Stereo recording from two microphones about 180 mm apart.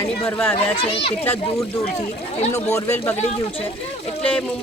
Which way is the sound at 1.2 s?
10° left (ahead or behind).